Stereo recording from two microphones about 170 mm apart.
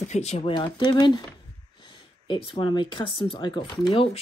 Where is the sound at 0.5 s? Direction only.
25° left (ahead or behind).